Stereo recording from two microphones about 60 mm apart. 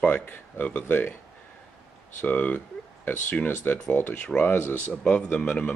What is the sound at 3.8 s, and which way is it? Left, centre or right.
Speech, left.